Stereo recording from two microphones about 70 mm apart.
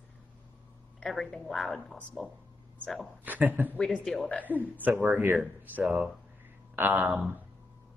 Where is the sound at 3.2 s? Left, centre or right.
Right.